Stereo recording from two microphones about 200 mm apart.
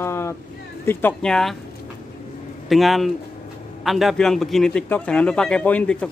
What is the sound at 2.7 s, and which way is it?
A man's voice, centre (ahead or behind).